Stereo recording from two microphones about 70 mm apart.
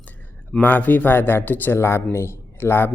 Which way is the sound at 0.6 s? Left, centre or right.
Left.